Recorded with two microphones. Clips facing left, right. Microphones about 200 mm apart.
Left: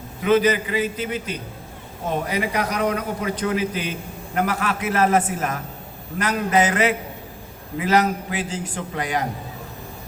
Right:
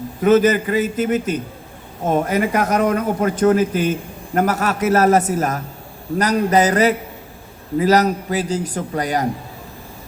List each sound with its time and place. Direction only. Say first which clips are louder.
0.2 s a man's voice: right 4 dB; 45° right (ahead or behind)